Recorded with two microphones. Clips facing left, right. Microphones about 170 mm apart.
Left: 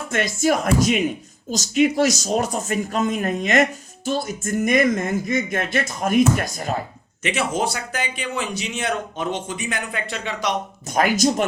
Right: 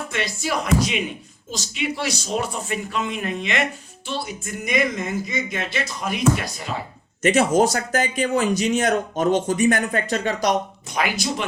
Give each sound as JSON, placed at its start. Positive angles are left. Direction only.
{"t": 0.1, "sound": "speech", "side_deg": 45}
{"t": 7.2, "sound": "speech", "side_deg": -45}
{"t": 10.9, "sound": "speech", "side_deg": 45}